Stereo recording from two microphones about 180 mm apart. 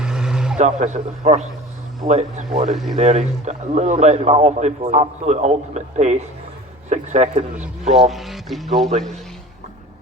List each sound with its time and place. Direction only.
0.0 s vehicle: 5° right (ahead or behind)
0.6 s a man's voice: 40° right (ahead or behind)
2.6 s speech: centre (ahead or behind)
3.0 s a man's voice: 40° right (ahead or behind)
8.1 s speech: centre (ahead or behind)